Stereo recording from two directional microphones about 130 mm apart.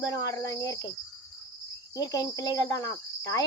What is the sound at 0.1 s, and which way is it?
Cricket, 25° left (ahead or behind).